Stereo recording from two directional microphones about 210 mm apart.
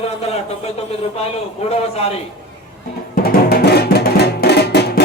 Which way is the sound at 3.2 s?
50° left (ahead or behind).